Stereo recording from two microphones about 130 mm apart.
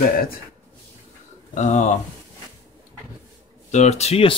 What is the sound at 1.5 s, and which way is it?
Speech, 70° left (ahead or behind).